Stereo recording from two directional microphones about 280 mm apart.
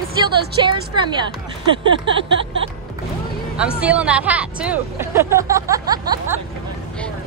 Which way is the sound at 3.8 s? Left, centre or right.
Centre.